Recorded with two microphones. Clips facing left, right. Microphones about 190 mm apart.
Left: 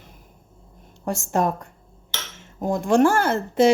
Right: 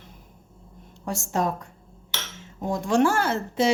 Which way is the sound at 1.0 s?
55° left (ahead or behind).